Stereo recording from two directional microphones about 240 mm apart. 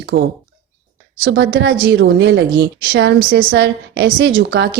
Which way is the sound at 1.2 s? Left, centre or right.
Right.